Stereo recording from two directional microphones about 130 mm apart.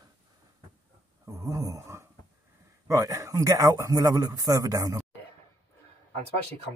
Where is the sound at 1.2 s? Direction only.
25° right (ahead or behind).